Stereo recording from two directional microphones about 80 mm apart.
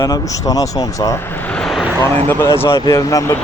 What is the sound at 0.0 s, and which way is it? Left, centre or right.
Speech, left.